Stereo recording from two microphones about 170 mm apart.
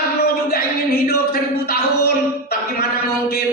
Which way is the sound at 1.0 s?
65° left (ahead or behind).